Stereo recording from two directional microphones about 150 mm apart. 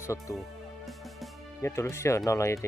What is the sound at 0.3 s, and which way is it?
Speech, 20° left (ahead or behind).